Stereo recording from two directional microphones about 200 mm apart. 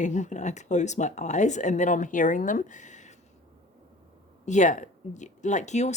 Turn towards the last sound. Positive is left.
turn(degrees=35)  # may be behind; listen again after turning